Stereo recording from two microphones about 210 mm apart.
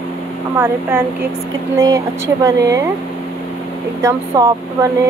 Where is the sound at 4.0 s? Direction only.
15° right (ahead or behind).